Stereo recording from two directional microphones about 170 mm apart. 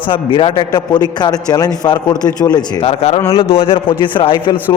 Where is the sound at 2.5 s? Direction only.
35° left (ahead or behind).